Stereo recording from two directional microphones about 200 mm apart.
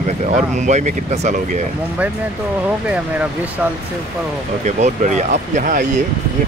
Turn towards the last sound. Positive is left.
turn(degrees=-40)  # may be behind; listen again after turning